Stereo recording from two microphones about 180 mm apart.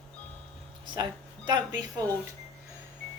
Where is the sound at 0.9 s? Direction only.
25° right (ahead or behind).